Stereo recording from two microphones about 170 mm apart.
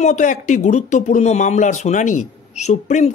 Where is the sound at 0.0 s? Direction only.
45° left (ahead or behind).